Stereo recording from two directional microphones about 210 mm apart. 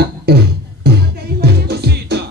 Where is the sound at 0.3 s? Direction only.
50° right (ahead or behind).